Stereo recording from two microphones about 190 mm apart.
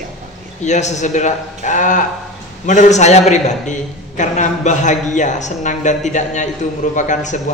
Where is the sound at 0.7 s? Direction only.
40° left (ahead or behind).